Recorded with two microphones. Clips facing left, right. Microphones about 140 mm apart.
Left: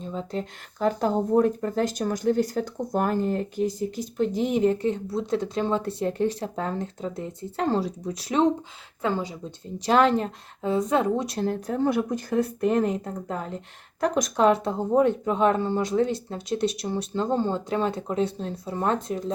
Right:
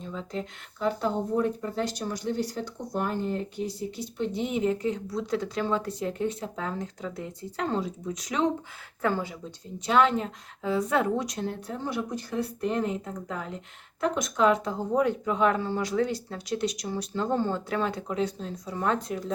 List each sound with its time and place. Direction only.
0.0 s speech: 35° left (ahead or behind)
9.0 s speech: 20° left (ahead or behind)
9.8 s speech: 40° left (ahead or behind)
10.7 s speech: 25° left (ahead or behind)
11.3 s speech: 40° left (ahead or behind)
11.7 s speech: 50° left (ahead or behind); by 19.2 s 25° left (ahead or behind)